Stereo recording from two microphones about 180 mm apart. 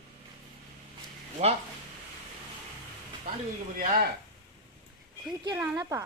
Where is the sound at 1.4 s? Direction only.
40° right (ahead or behind).